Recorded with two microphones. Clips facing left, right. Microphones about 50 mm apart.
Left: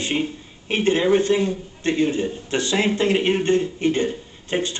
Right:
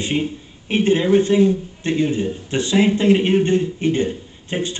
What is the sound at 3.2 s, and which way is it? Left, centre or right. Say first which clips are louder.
Speech: right 2 dB; left.